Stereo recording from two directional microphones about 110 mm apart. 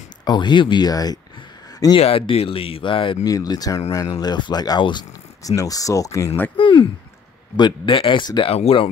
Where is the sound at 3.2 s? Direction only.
35° left (ahead or behind).